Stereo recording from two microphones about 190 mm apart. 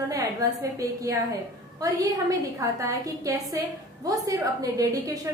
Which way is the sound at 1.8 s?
15° right (ahead or behind).